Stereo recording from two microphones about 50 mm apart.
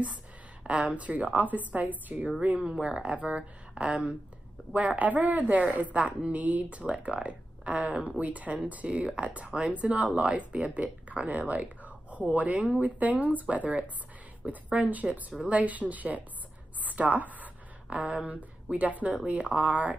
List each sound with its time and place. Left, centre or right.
0.7 s a woman's voice: right